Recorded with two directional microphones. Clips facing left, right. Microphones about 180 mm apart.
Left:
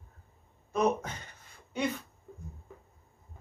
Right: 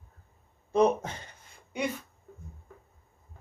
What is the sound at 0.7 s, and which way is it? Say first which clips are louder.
Speech: right 4 dB; 30° right (ahead or behind).